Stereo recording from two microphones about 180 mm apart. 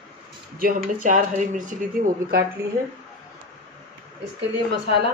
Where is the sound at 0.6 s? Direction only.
55° right (ahead or behind).